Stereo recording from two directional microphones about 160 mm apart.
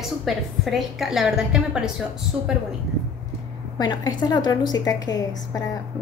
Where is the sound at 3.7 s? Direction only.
25° left (ahead or behind).